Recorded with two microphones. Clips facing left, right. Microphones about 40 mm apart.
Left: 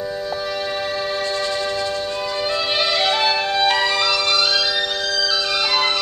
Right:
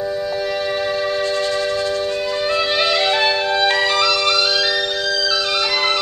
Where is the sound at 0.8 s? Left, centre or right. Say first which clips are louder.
Right 3 dB; centre.